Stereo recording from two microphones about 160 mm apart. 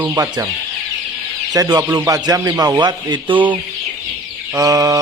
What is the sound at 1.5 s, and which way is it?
Speech, 25° right (ahead or behind).